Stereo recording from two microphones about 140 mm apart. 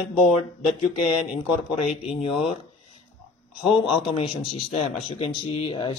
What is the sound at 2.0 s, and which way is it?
Speech, 40° left (ahead or behind).